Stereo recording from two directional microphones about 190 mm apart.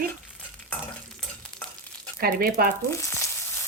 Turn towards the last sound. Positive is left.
turn(degrees=15)  # may be behind; listen again after turning